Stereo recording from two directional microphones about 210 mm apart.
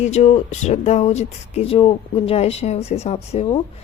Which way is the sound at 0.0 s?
35° left (ahead or behind).